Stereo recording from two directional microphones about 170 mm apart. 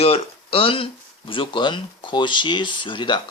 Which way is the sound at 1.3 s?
30° left (ahead or behind).